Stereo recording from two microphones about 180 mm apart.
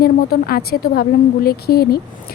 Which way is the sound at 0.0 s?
55° left (ahead or behind).